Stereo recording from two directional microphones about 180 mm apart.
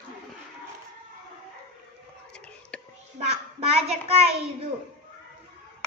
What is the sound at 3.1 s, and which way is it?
Child singing, 35° right (ahead or behind).